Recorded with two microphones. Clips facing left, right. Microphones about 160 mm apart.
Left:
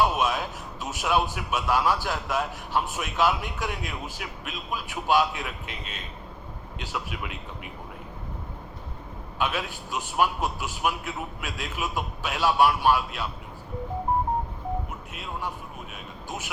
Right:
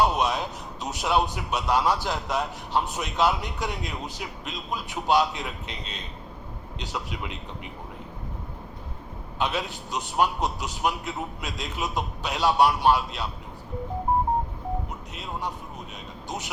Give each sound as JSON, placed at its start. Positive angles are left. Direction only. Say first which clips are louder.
{"t": 0.0, "sound": "a man's voice", "louder": "right 1 dB", "side_deg": -20}
{"t": 9.4, "sound": "a man's voice", "louder": "right 1 dB", "side_deg": -20}
{"t": 15.2, "sound": "a man's voice", "louder": "right 1 dB", "side_deg": -20}